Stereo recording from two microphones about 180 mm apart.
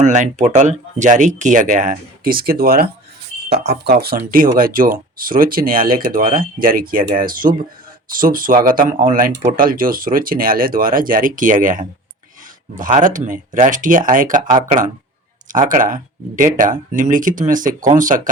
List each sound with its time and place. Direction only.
0.0 s speech: 40° right (ahead or behind)
15.5 s speech: 45° right (ahead or behind)